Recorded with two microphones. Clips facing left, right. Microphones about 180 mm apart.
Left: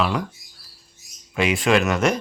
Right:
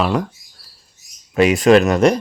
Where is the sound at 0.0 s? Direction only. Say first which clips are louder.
Right 4 dB; 45° right (ahead or behind).